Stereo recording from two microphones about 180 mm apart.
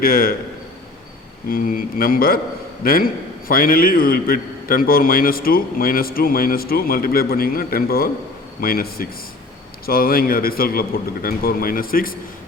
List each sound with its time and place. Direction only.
0.0 s a man's voice: 55° left (ahead or behind)
1.5 s a man's voice: 50° left (ahead or behind)